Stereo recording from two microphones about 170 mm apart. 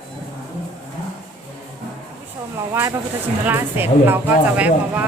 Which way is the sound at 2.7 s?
15° right (ahead or behind).